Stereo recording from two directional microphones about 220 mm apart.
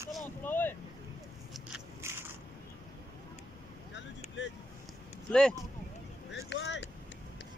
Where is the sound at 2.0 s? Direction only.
10° right (ahead or behind).